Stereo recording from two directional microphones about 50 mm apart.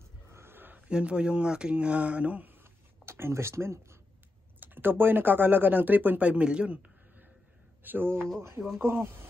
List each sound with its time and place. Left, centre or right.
0.3 s a sound: right
0.7 s speech: right
3.1 s speech: right
4.6 s speech: right
7.8 s speech: right
8.7 s speech: right